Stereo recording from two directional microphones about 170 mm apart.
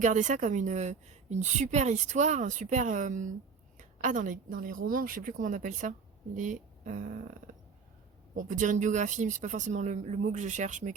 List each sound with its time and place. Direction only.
0.0 s a woman's voice: 45° right (ahead or behind)